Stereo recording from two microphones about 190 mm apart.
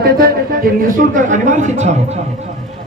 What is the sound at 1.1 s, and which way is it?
Speech, 40° right (ahead or behind).